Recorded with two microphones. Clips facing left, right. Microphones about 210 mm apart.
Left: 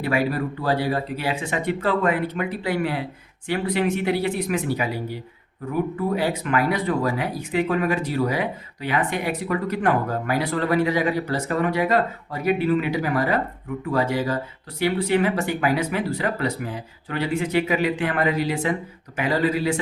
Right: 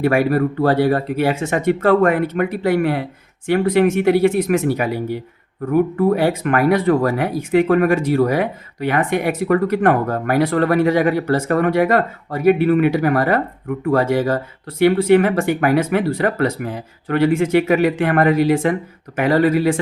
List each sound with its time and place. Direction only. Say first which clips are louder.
0.0 s speech: right 7 dB; 55° right (ahead or behind)